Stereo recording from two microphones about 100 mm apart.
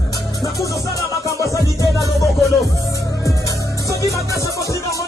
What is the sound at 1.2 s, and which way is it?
Music, 30° left (ahead or behind).